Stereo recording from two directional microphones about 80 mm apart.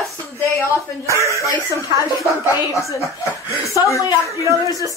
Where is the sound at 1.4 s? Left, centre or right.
Left.